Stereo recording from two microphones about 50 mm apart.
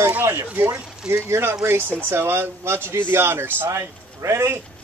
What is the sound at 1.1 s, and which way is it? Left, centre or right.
Speech, right.